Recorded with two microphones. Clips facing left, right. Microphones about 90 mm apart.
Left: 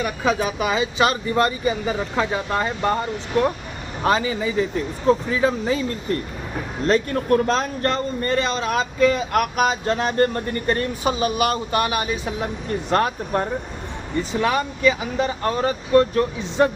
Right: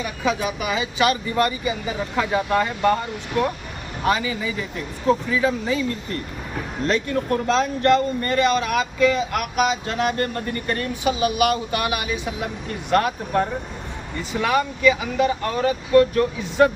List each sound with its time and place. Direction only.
0.0 s a man's voice: 40° left (ahead or behind)
4.0 s a man's voice: 35° left (ahead or behind)